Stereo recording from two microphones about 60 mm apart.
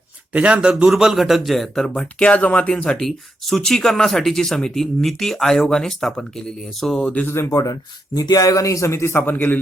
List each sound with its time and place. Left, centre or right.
0.3 s speech: centre
0.9 s speech: centre
7.5 s speech: left